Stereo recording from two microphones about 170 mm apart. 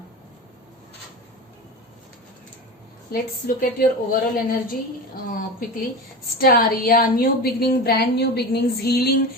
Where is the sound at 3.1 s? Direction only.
55° left (ahead or behind).